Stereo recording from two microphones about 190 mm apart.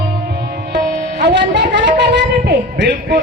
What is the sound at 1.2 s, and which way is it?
A man's voice, 65° right (ahead or behind).